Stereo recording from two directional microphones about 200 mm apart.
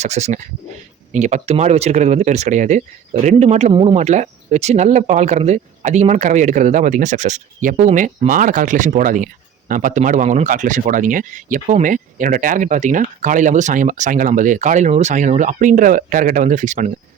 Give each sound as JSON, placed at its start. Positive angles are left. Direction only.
{"t": 0.0, "sound": "speech", "side_deg": -35}